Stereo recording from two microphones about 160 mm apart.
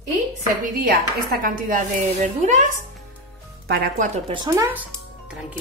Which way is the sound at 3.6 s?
70° right (ahead or behind).